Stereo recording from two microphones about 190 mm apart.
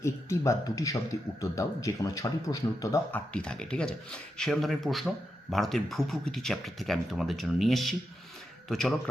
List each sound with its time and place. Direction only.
0.0 s speech: 15° left (ahead or behind)
3.3 s speech: 5° left (ahead or behind)